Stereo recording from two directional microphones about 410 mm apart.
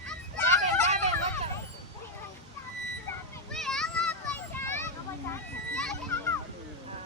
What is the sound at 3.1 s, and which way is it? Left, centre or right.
Children playing, centre.